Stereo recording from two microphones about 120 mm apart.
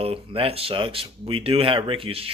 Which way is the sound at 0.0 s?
55° right (ahead or behind).